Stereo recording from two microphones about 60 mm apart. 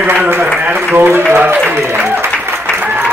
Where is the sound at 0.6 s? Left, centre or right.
Right.